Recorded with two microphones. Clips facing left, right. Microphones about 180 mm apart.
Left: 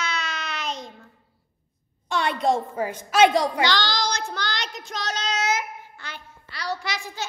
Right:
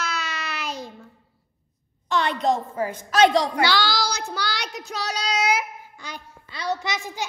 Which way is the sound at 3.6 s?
10° right (ahead or behind).